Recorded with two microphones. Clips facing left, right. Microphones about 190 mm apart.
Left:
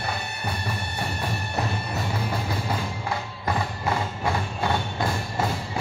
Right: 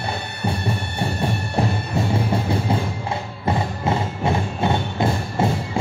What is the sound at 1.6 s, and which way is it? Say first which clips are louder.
Music: right 7 dB; 30° right (ahead or behind).